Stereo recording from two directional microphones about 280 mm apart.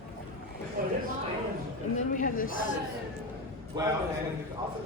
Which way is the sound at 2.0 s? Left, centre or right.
Left.